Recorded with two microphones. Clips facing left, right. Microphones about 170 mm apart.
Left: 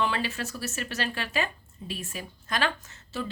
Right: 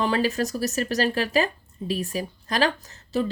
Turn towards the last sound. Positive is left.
turn(degrees=-35)  # may be behind; listen again after turning